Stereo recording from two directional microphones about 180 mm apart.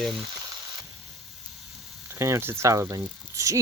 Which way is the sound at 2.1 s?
15° right (ahead or behind).